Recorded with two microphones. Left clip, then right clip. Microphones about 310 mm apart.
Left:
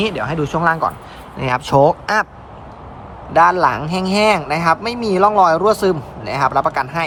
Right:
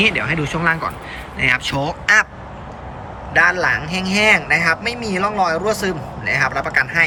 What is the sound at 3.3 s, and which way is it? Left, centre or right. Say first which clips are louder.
Speech: left 3 dB; centre.